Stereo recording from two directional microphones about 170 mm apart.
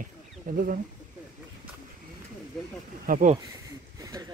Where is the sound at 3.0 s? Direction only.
50° right (ahead or behind).